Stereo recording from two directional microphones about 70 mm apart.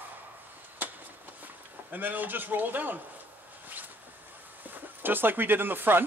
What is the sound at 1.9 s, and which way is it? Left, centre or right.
A man's voice, right.